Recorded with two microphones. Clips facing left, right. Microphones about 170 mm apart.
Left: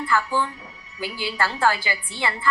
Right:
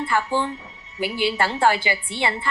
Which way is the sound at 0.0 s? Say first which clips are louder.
Right 1 dB; 25° right (ahead or behind).